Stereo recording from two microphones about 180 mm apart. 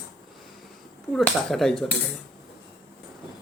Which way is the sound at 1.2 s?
Centre (ahead or behind).